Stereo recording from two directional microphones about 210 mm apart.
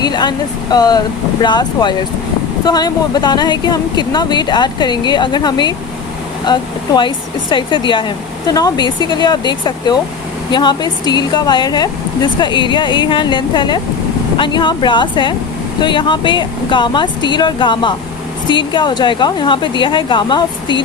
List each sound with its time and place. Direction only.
0.0 s speech: 20° left (ahead or behind)